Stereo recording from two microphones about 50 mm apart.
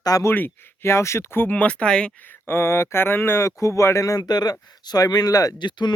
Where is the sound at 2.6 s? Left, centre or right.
Left.